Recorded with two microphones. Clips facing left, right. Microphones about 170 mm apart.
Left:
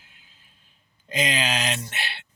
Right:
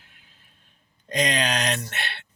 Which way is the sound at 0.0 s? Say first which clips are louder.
Right 1 dB; 60° right (ahead or behind).